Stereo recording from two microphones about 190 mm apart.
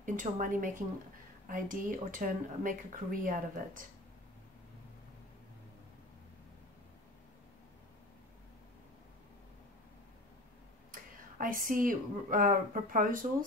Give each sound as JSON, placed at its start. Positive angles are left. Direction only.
{"t": 0.0, "sound": "speech", "side_deg": -45}
{"t": 10.9, "sound": "speech", "side_deg": -45}